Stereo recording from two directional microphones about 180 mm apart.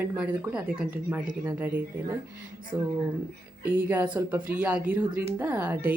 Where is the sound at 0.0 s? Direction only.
10° right (ahead or behind).